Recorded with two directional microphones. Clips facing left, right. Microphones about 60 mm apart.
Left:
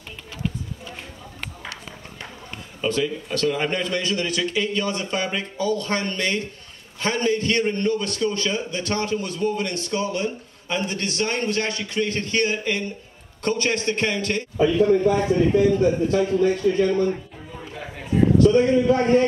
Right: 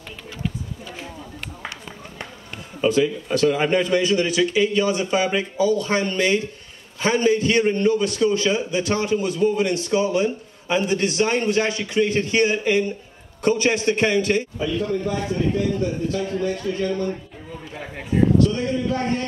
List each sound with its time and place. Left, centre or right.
2.8 s a man's voice: centre
14.6 s a man's voice: left
18.9 s a man's voice: centre